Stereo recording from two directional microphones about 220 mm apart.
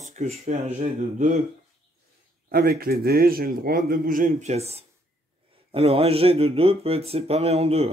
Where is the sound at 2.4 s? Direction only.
45° right (ahead or behind).